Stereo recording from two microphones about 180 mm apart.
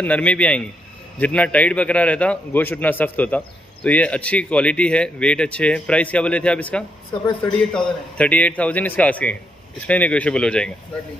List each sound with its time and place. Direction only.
0.0 s a man's voice: 10° left (ahead or behind)